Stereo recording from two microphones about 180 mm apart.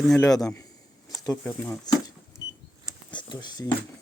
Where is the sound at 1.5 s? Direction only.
10° left (ahead or behind).